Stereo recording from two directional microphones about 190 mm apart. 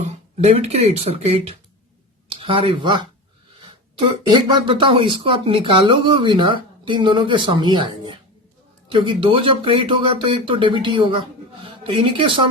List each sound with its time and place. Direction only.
0.0 s speech: 35° right (ahead or behind)